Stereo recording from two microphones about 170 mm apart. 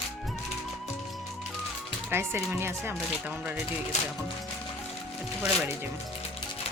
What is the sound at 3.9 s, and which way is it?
Speech, 40° left (ahead or behind).